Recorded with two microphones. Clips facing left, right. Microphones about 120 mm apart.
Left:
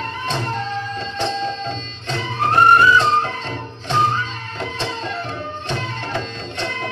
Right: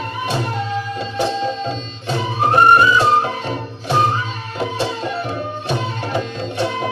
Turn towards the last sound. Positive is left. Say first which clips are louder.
# right 6 dB
turn(degrees=-10)  # may be behind; listen again after turning